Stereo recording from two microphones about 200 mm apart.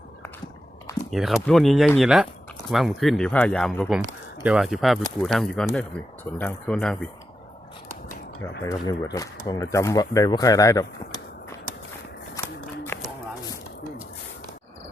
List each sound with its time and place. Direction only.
1.1 s speech: centre (ahead or behind)
8.6 s speech: 20° left (ahead or behind)
12.9 s a sound: 10° left (ahead or behind)